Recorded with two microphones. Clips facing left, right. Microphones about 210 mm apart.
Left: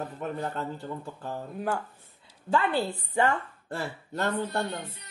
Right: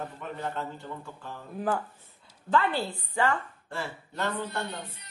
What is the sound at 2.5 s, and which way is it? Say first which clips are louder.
Speech: left 1 dB; 20° left (ahead or behind).